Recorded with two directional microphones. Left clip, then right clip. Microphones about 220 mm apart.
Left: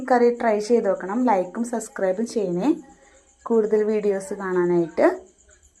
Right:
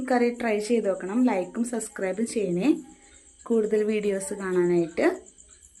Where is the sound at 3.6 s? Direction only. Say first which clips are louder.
Left 4 dB; 20° right (ahead or behind).